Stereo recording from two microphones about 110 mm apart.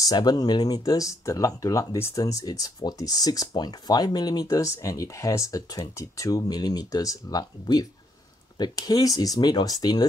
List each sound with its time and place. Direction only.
0.0 s speech: 40° left (ahead or behind)